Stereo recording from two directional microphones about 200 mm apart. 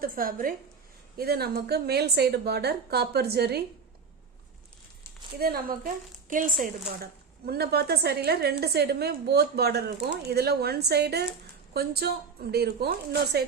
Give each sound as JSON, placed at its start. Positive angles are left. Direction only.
{"t": 0.0, "sound": "a woman's voice", "side_deg": -45}
{"t": 5.4, "sound": "a woman's voice", "side_deg": -50}
{"t": 7.0, "sound": "a woman's voice", "side_deg": -50}